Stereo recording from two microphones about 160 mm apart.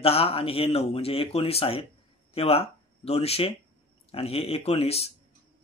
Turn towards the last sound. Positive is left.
turn(degrees=40)  # may be behind; listen again after turning